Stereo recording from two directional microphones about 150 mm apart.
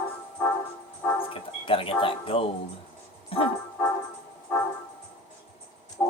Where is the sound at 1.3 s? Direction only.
35° left (ahead or behind).